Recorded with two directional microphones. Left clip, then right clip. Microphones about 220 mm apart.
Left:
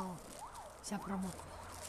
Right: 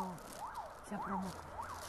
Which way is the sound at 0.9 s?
25° left (ahead or behind).